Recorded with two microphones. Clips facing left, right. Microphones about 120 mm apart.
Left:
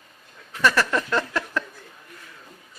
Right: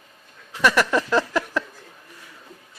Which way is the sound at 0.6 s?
15° right (ahead or behind).